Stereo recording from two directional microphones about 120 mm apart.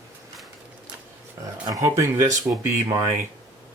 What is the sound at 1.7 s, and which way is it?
Speech, 25° right (ahead or behind).